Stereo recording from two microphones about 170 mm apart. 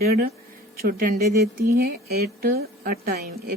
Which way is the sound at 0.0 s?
65° right (ahead or behind).